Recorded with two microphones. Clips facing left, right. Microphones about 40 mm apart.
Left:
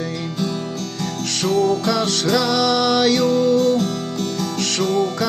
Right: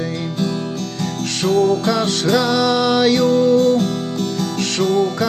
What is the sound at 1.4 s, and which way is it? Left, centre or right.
Music, right.